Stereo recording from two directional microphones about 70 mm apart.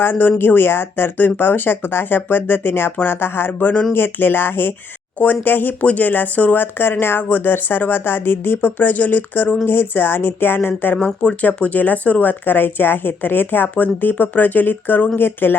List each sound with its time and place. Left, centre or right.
0.0 s speech: left